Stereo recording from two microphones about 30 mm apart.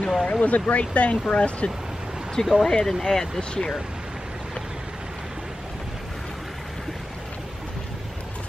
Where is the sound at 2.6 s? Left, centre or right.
Centre.